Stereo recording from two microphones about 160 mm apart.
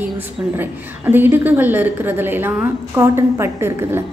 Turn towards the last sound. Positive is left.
turn(degrees=-15)  # may be behind; listen again after turning